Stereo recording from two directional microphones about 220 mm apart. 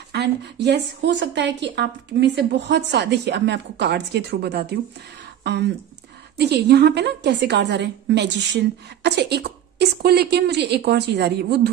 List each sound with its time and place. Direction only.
0.1 s a woman's voice: 50° right (ahead or behind)